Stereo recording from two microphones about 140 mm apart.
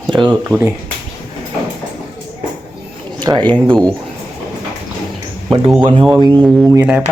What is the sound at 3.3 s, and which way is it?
Speech, 35° right (ahead or behind).